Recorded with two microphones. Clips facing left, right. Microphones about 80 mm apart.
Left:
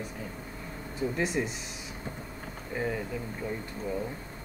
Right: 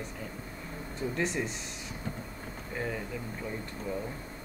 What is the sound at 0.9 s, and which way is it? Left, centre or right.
Speech, centre.